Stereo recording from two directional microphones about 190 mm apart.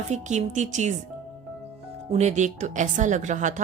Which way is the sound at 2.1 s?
40° right (ahead or behind).